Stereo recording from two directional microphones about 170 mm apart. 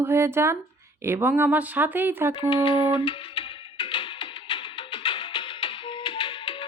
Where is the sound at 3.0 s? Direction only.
30° left (ahead or behind).